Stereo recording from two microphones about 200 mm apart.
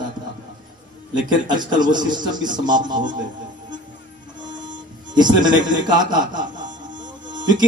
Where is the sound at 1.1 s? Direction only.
20° right (ahead or behind).